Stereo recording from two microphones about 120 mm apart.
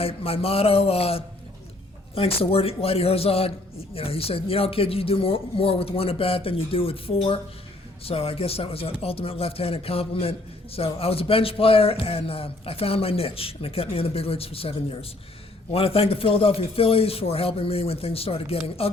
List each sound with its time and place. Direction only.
0.0 s speech: 55° left (ahead or behind)